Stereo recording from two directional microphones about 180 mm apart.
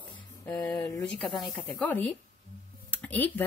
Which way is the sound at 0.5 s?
5° left (ahead or behind).